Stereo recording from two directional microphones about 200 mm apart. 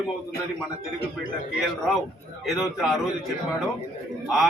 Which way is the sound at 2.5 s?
Centre (ahead or behind).